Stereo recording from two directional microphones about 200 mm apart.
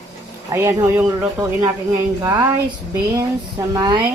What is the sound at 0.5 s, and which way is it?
Speech, 10° right (ahead or behind).